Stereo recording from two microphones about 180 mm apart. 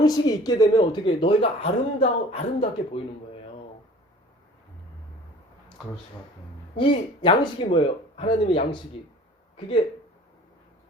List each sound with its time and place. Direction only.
0.0 s speech: 20° left (ahead or behind)
6.7 s speech: 25° left (ahead or behind)